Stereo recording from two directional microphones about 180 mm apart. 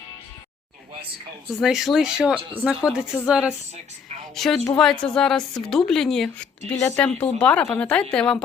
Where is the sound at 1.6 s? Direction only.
Centre (ahead or behind).